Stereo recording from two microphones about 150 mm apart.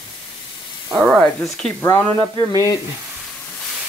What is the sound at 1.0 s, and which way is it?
Speech, centre (ahead or behind).